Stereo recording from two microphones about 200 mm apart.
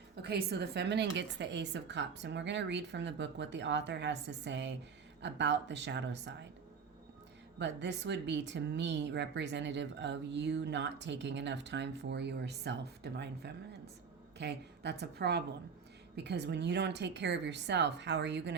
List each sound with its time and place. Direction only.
0.2 s speech: 55° right (ahead or behind)
7.6 s speech: 60° right (ahead or behind)